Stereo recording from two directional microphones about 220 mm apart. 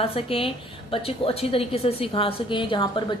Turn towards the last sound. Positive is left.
turn(degrees=20)  # may be behind; listen again after turning